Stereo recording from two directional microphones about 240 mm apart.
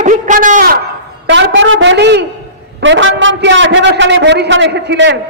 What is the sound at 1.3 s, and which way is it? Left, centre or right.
A woman's voice, right.